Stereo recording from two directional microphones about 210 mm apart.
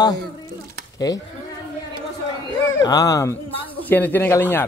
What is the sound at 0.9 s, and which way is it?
Speech, 15° left (ahead or behind).